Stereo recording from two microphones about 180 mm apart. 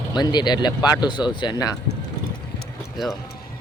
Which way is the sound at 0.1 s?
25° left (ahead or behind).